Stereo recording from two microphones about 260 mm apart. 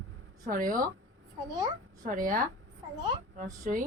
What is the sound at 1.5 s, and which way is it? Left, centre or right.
Speech, centre.